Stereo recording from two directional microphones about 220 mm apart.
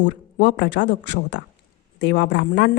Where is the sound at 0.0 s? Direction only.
50° left (ahead or behind).